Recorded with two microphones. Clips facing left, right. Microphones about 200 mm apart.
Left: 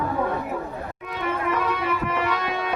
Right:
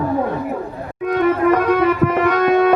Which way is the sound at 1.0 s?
50° right (ahead or behind).